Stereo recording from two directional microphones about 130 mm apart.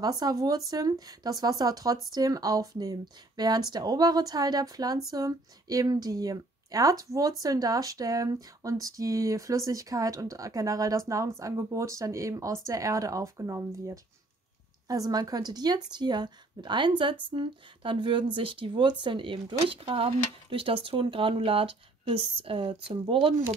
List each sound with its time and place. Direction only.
0.0 s a woman's voice: 30° right (ahead or behind)